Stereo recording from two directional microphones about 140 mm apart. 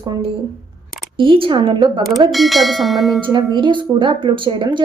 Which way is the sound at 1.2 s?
40° right (ahead or behind).